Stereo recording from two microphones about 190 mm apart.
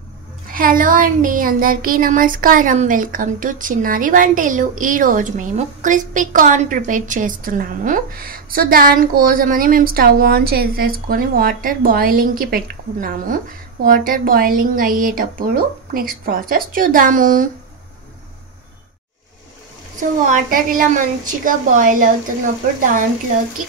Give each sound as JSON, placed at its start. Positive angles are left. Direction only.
{"t": 0.5, "sound": "speech", "side_deg": -45}
{"t": 20.0, "sound": "speech", "side_deg": -45}